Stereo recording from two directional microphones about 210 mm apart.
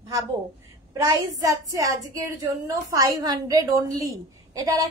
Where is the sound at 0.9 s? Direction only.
20° right (ahead or behind).